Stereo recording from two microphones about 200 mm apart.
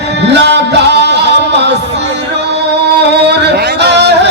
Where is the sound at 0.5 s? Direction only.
60° right (ahead or behind).